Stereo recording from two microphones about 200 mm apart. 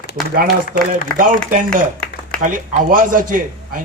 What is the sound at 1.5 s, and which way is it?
A man's voice, 45° right (ahead or behind).